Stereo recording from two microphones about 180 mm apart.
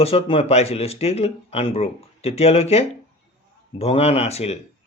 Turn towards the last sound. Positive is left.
turn(degrees=35)  # may be behind; listen again after turning